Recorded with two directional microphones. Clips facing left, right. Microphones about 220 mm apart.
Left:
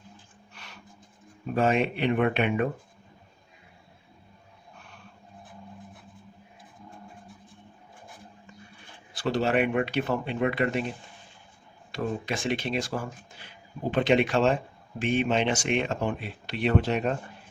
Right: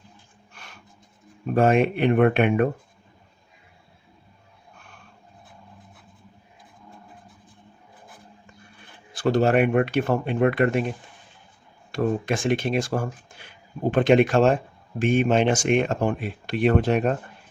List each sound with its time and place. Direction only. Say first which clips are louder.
0.5 s a sound: right 2 dB; 50° right (ahead or behind)
1.5 s speech: right 5 dB; 50° right (ahead or behind)
9.1 s speech: right 5 dB; 50° right (ahead or behind)
11.9 s speech: right 7 dB; 50° right (ahead or behind)